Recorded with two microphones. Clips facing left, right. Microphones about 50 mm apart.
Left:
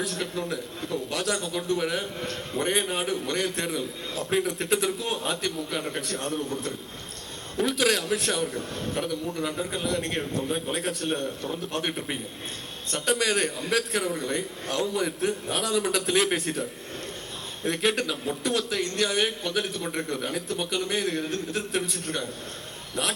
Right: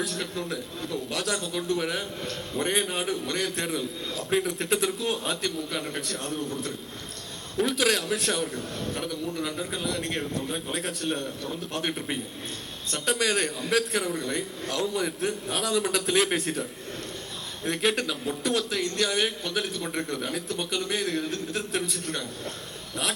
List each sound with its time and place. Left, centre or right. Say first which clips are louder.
0.3 s speech: left 1 dB; centre
2.2 s a man's voice: left 1 dB; left
2.6 s speech: left 1 dB; centre
7.6 s speech: even; centre
17.7 s speech: left 1 dB; centre
21.9 s a man's voice: left 1 dB; left